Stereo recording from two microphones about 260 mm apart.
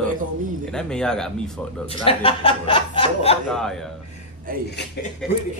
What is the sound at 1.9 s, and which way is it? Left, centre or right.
Speech, left.